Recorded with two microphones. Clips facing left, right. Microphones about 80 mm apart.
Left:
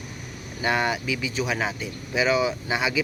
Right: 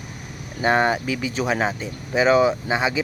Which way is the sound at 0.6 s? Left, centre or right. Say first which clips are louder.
Right 5 dB; right.